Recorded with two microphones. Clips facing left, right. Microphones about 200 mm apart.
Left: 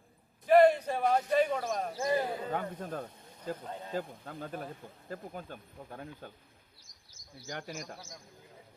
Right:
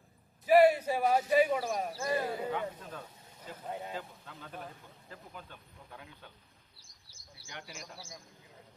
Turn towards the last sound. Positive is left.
turn(degrees=50)  # may be behind; listen again after turning